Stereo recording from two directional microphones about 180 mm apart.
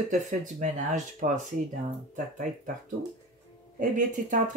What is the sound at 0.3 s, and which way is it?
Speech, 45° right (ahead or behind).